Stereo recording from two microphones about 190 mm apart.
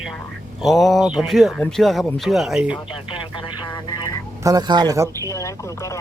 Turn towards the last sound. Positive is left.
turn(degrees=15)  # may be behind; listen again after turning